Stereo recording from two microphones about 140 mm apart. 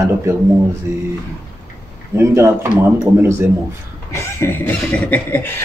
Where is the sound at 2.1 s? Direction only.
20° right (ahead or behind).